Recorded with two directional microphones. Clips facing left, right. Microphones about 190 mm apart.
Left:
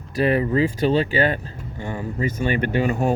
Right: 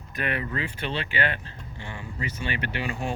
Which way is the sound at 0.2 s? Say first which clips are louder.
Left 11 dB; 35° left (ahead or behind).